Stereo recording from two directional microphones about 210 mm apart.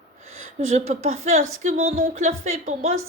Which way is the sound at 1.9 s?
35° right (ahead or behind).